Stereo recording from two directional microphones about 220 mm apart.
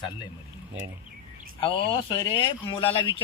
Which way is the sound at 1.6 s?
25° left (ahead or behind).